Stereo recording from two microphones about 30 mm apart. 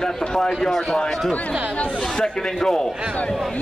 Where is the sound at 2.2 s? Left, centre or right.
Left.